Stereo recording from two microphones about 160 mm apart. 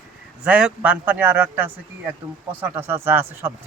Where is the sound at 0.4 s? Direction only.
10° right (ahead or behind).